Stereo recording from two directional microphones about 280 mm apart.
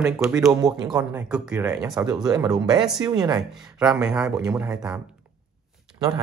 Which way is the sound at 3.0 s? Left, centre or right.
Centre.